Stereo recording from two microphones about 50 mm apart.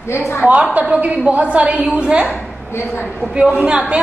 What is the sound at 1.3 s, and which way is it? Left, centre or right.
Speech, right.